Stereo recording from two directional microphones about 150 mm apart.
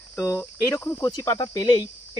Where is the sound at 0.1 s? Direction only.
15° left (ahead or behind).